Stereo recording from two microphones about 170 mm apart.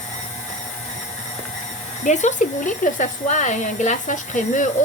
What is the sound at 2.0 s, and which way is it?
Speech, 45° left (ahead or behind).